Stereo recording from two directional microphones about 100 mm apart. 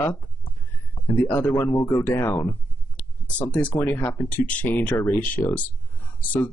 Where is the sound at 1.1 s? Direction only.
15° left (ahead or behind).